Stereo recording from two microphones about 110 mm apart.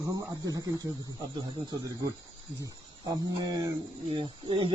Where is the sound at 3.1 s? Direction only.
35° right (ahead or behind).